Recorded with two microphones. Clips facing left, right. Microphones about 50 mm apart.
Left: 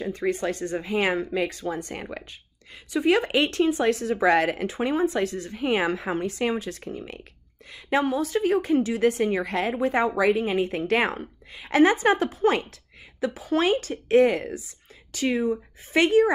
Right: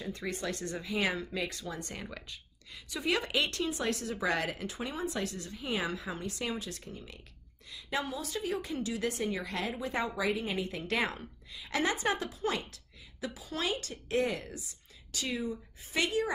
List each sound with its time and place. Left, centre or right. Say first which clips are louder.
0.0 s speech: left 10 dB; left
5.0 s speech: left 11 dB; left
5.5 s a woman's voice: left 11 dB; left